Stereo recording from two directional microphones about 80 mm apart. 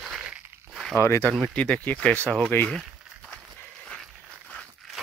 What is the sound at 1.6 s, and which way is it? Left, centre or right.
Speech, centre.